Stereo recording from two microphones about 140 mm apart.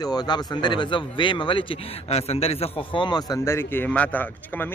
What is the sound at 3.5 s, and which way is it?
Speech, 15° left (ahead or behind).